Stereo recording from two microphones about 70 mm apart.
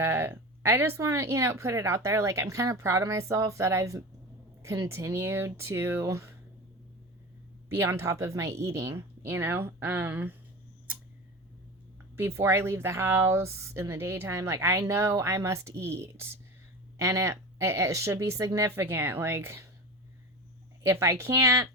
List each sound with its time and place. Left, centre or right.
0.0 s speech: right
7.7 s speech: right
12.1 s speech: right
20.8 s speech: right